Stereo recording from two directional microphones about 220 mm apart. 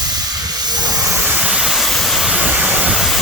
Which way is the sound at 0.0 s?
20° right (ahead or behind).